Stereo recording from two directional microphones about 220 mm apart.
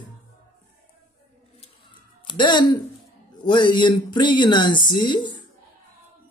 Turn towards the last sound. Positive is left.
turn(degrees=20)  # may be behind; listen again after turning